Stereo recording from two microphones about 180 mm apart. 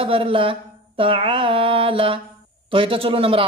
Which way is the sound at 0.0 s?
30° right (ahead or behind).